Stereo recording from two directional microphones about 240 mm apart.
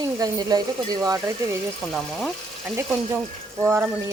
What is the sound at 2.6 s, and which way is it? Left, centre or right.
Speech, centre.